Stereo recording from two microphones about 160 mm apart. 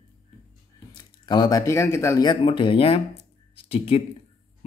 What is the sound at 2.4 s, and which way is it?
Speech, 35° left (ahead or behind).